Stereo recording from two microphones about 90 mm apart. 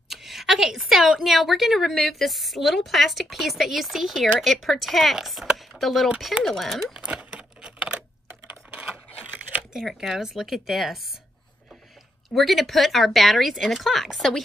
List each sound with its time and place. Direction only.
0.1 s a woman's voice: centre (ahead or behind)
6.0 s typing: 10° right (ahead or behind)
8.3 s a sound: 20° right (ahead or behind)
9.8 s a woman's voice: 5° right (ahead or behind)
12.4 s a woman's voice: centre (ahead or behind)